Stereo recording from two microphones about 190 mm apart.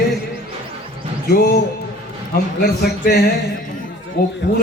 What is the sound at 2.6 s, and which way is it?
Speech, 55° left (ahead or behind).